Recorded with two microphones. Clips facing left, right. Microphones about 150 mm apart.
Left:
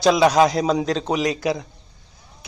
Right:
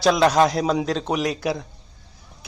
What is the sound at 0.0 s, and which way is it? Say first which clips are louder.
A man's voice: left 2 dB; centre (ahead or behind).